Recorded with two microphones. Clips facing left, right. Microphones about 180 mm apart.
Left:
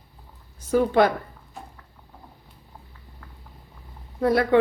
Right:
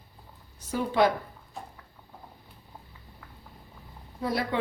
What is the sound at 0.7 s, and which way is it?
Speech, 55° left (ahead or behind).